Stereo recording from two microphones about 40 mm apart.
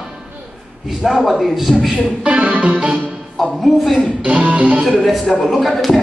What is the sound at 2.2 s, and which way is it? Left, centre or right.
Music, right.